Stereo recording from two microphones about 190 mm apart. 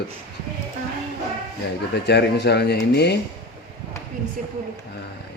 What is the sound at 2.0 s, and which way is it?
A man's voice, 60° left (ahead or behind).